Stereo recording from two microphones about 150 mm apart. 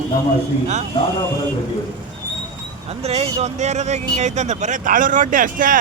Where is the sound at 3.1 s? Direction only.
45° right (ahead or behind); by 5.7 s 65° right (ahead or behind).